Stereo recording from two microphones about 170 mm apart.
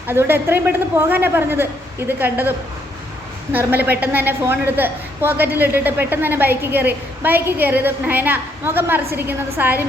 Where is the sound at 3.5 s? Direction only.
10° right (ahead or behind).